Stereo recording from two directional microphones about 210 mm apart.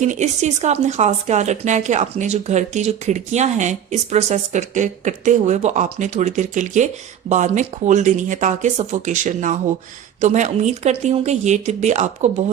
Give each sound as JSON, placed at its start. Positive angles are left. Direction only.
{"t": 0.0, "sound": "speech", "side_deg": -35}